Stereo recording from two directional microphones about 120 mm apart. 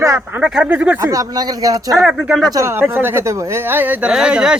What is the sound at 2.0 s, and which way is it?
Speech, 5° right (ahead or behind).